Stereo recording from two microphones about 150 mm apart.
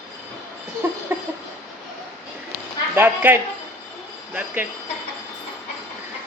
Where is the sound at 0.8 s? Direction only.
15° right (ahead or behind).